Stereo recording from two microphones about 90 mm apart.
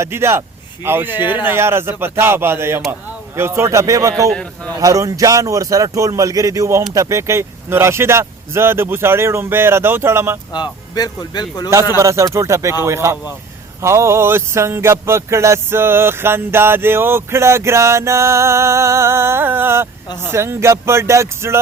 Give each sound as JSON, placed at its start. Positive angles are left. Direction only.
{"t": 0.0, "sound": "music", "side_deg": -30}
{"t": 3.3, "sound": "speech", "side_deg": -30}
{"t": 6.9, "sound": "music", "side_deg": -35}
{"t": 10.5, "sound": "speech", "side_deg": 50}
{"t": 11.9, "sound": "speech", "side_deg": -35}
{"t": 13.8, "sound": "music", "side_deg": -30}
{"t": 20.2, "sound": "speech", "side_deg": -30}